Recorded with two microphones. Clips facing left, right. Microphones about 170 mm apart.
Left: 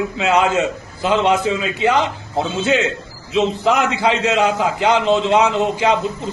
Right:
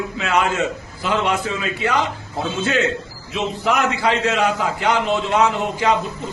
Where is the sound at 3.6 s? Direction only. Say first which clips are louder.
Left 3 dB; 20° left (ahead or behind).